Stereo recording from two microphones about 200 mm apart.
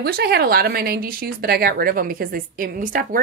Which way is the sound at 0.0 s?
50° right (ahead or behind).